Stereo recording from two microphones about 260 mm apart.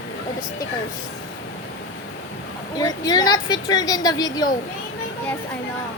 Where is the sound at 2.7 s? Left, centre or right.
Centre.